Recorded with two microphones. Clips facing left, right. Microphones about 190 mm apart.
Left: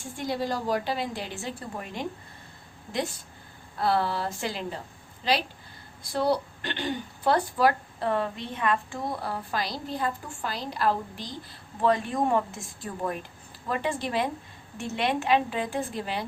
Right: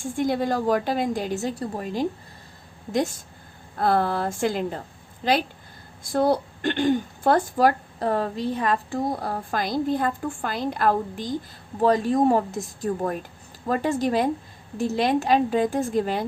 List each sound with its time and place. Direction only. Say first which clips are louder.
0.0 s a woman's voice: right 7 dB; 50° right (ahead or behind); by 2.0 s 35° right (ahead or behind)
3.8 s a woman's voice: right 4 dB; 50° right (ahead or behind)
11.8 s a woman's voice: right 5 dB; 40° right (ahead or behind)